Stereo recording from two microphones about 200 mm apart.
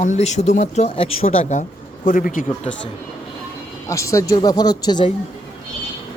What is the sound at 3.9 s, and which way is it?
Speech, 15° left (ahead or behind).